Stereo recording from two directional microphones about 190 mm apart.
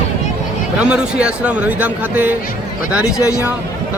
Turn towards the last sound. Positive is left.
turn(degrees=20)  # may be behind; listen again after turning